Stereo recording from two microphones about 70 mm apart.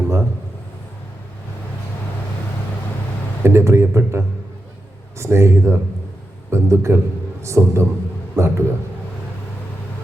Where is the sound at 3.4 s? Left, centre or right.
Right.